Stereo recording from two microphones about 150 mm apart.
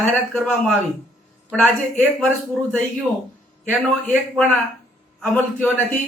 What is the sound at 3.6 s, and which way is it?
A man's voice, 10° left (ahead or behind).